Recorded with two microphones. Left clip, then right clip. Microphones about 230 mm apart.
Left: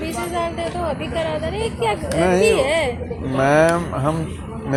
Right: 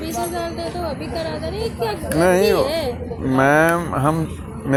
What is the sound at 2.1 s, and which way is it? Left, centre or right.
Speech, right.